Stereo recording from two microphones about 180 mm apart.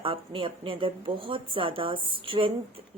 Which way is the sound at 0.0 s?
30° right (ahead or behind).